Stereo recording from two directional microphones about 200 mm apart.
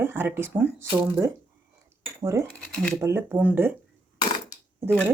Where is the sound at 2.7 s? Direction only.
5° left (ahead or behind).